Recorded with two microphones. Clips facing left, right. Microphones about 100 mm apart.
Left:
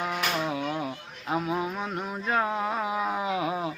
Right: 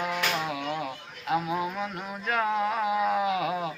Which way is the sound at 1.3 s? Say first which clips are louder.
Right 1 dB; 30° left (ahead or behind).